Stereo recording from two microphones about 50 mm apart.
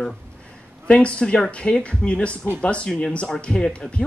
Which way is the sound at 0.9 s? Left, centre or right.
Left.